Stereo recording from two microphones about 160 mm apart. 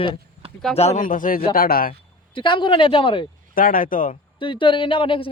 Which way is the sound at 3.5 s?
60° left (ahead or behind).